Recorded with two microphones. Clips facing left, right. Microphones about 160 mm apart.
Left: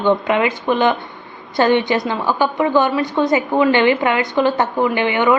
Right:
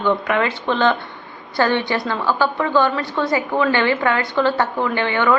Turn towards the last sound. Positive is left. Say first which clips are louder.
# left 3 dB
turn(degrees=15)  # may be behind; listen again after turning